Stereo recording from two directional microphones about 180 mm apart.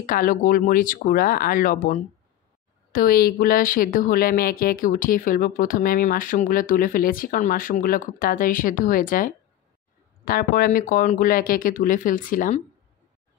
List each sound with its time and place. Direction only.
0.0 s speech: 50° left (ahead or behind)